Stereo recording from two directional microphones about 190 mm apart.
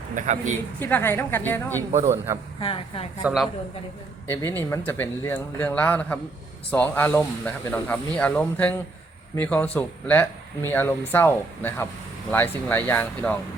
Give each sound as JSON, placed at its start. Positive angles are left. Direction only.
{"t": 0.1, "sound": "a man's voice", "side_deg": -40}
{"t": 0.8, "sound": "speech", "side_deg": 10}
{"t": 1.9, "sound": "a man's voice", "side_deg": -35}
{"t": 2.6, "sound": "a woman's voice", "side_deg": 30}
{"t": 3.2, "sound": "a man's voice", "side_deg": 0}
{"t": 4.3, "sound": "speech", "side_deg": 10}